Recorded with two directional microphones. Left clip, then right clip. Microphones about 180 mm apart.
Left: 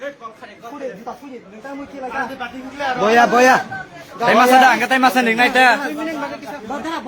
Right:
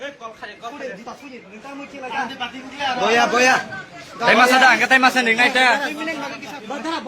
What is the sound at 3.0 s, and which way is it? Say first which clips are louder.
Speech: left 4 dB; 75° left (ahead or behind).